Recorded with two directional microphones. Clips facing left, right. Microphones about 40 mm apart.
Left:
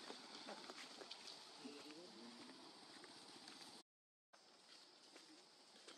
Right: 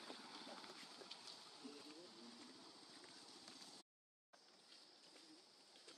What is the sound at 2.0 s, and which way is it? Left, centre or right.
Motorcycle, centre.